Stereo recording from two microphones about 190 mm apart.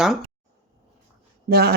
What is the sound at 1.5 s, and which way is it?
Speech, 55° right (ahead or behind).